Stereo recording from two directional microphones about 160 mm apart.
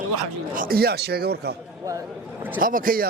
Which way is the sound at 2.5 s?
60° right (ahead or behind).